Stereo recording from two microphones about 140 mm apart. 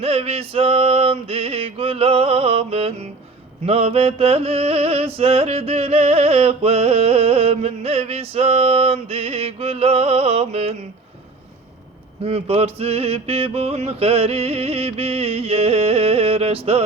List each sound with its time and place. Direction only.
0.0 s mantra: 45° right (ahead or behind)
12.2 s mantra: 45° right (ahead or behind)